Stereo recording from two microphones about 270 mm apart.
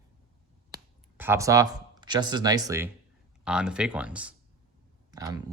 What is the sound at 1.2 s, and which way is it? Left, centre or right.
Speech, centre.